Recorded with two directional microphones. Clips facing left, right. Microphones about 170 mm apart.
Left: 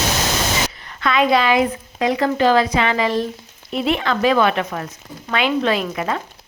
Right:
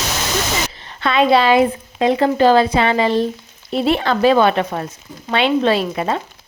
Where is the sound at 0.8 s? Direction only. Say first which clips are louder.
Right 3 dB; 30° right (ahead or behind).